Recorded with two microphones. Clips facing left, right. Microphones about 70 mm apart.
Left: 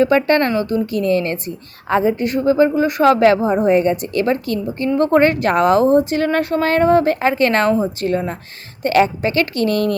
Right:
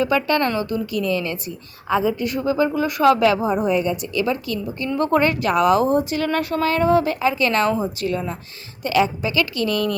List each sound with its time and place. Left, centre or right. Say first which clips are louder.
0.0 s a woman's voice: left 5 dB; left
3.7 s a woman's voice: left 6 dB; left
8.8 s a woman's voice: left 5 dB; left